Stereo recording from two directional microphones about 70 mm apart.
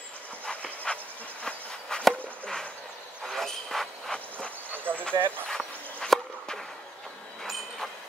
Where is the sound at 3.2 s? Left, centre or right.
Centre.